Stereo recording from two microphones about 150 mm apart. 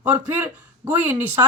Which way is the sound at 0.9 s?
15° right (ahead or behind).